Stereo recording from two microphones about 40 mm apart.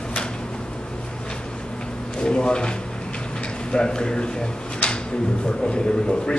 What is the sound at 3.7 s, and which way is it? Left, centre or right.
Speech, left.